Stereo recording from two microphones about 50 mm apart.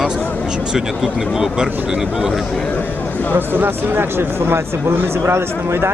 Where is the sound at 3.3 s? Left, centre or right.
Right.